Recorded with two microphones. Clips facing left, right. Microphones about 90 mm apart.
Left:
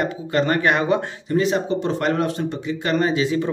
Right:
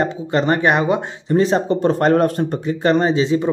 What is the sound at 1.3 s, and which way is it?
Speech, 35° right (ahead or behind).